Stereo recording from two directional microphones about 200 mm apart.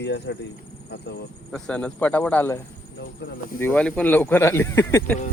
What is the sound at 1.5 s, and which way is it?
Speech, 5° left (ahead or behind).